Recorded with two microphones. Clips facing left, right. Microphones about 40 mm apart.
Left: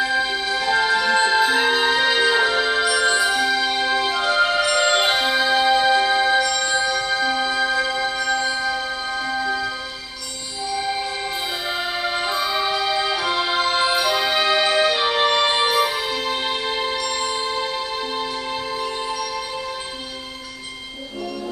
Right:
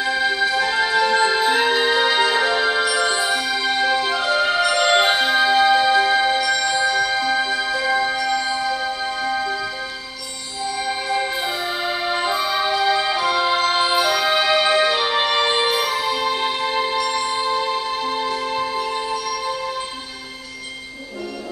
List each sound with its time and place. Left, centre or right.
0.7 s music: centre
12.1 s music: centre